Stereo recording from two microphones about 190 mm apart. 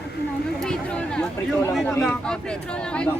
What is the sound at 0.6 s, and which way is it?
A man's voice, 5° left (ahead or behind).